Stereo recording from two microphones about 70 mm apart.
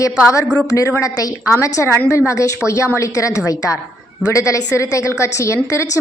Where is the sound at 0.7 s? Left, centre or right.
Left.